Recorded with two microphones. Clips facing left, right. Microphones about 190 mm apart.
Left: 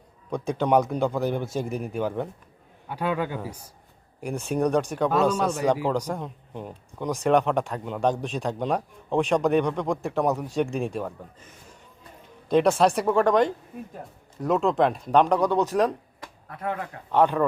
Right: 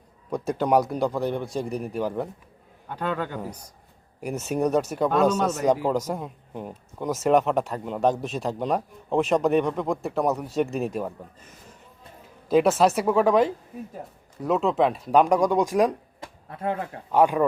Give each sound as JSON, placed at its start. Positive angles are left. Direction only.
{"t": 0.3, "sound": "speech", "side_deg": 0}
{"t": 2.9, "sound": "a man's voice", "side_deg": 10}
{"t": 4.2, "sound": "speech", "side_deg": -5}
{"t": 12.5, "sound": "speech", "side_deg": -5}
{"t": 16.2, "sound": "a sound", "side_deg": -25}
{"t": 17.1, "sound": "speech", "side_deg": -10}